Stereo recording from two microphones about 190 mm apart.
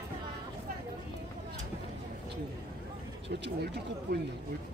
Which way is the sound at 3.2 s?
65° right (ahead or behind).